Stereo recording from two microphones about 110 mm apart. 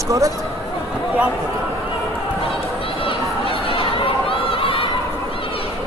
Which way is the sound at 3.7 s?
55° left (ahead or behind).